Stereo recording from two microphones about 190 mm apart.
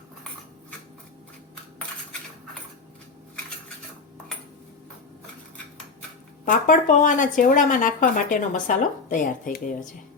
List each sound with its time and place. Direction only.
6.4 s speech: 40° left (ahead or behind)